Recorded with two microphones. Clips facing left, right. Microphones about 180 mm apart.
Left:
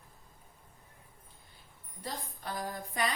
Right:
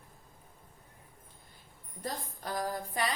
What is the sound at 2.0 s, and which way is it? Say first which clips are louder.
Music: right 2 dB; 40° right (ahead or behind).